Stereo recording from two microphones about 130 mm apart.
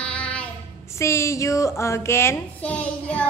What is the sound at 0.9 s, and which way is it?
Speech, 20° left (ahead or behind).